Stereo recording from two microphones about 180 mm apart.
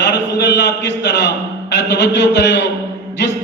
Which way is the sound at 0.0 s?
75° left (ahead or behind).